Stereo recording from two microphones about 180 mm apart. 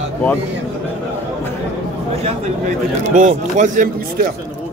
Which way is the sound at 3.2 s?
45° right (ahead or behind).